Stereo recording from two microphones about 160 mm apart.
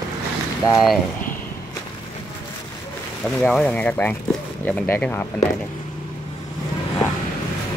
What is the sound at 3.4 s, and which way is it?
Speech, 5° left (ahead or behind).